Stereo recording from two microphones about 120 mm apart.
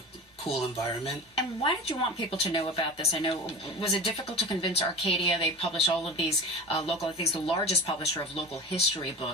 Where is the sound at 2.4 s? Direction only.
45° left (ahead or behind).